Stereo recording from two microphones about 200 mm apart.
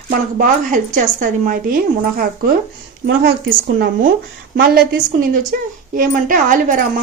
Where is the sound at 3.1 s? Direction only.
55° right (ahead or behind).